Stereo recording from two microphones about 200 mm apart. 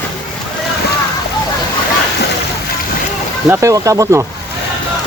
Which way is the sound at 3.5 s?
15° right (ahead or behind).